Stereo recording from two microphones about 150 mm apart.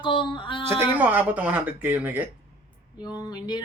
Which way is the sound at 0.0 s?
30° left (ahead or behind).